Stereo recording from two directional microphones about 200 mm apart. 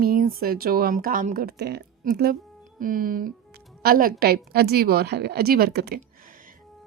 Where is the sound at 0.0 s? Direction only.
45° right (ahead or behind).